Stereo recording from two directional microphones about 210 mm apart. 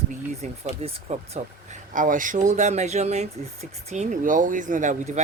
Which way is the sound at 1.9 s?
40° right (ahead or behind).